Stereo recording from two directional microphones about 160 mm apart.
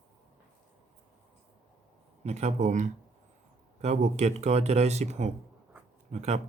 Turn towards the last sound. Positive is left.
turn(degrees=-45)  # may be behind; listen again after turning